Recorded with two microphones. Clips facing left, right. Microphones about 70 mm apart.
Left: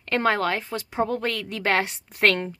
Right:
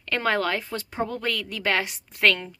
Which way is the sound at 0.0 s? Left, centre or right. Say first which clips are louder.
Left 2 dB; left.